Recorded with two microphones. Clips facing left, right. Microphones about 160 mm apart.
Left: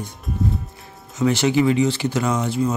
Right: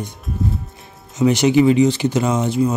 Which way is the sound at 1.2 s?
15° right (ahead or behind).